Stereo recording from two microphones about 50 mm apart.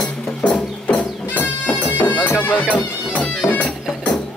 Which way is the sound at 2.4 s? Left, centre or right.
Left.